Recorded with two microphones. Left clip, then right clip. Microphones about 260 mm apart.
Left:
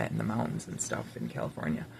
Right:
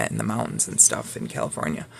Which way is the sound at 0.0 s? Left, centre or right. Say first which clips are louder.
Right 7 dB; right.